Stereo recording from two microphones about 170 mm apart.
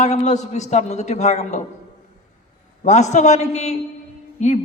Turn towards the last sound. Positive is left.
turn(degrees=45)  # may be behind; listen again after turning